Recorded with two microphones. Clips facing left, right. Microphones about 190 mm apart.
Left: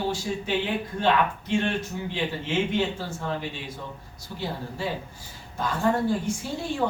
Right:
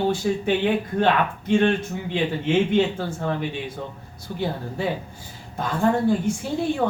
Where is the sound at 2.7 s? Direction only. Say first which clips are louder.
Right 6 dB; 60° right (ahead or behind).